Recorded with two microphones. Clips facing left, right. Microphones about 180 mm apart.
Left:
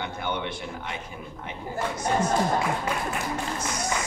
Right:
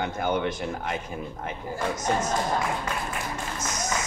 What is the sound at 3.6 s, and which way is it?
Speech, 45° right (ahead or behind).